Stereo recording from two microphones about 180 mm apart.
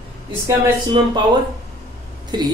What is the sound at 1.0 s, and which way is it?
Speech, 25° right (ahead or behind).